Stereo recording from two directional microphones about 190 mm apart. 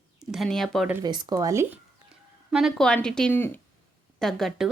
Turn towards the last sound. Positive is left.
turn(degrees=0)  # may be behind; listen again after turning